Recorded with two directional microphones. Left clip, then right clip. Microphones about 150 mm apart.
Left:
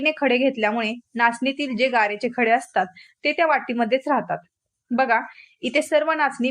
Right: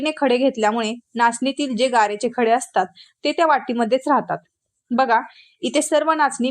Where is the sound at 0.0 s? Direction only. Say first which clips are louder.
Right 1 dB; 25° right (ahead or behind).